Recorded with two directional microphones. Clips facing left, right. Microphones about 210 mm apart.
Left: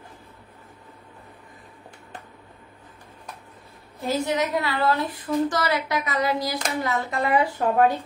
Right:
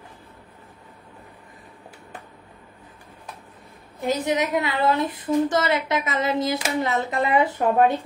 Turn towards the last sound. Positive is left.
turn(degrees=-25)  # may be behind; listen again after turning